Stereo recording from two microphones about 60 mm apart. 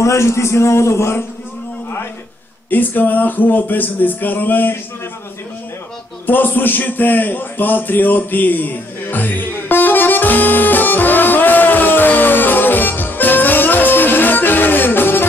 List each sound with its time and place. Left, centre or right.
0.0 s a man's voice: left
2.7 s speech: left
6.2 s a sound: left